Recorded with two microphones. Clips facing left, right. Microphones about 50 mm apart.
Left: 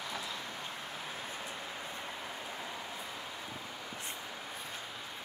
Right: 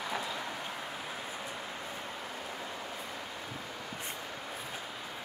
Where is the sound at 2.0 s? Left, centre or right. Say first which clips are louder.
Right 1 dB; centre.